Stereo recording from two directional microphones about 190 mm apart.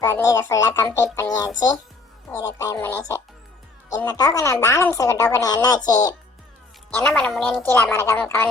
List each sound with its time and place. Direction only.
0.3 s a woman's voice: 15° left (ahead or behind)
0.9 s music: 15° left (ahead or behind)
2.3 s a woman's voice: 20° left (ahead or behind)
6.9 s a woman's voice: 5° left (ahead or behind)